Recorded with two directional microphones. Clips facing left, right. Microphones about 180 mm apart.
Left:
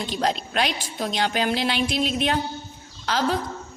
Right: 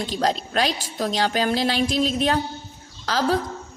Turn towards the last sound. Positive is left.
turn(degrees=-40)  # may be behind; listen again after turning